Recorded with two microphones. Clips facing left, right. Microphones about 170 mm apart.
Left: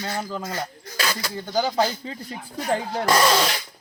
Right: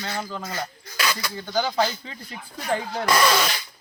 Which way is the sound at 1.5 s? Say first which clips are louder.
Left 1 dB; 15° left (ahead or behind).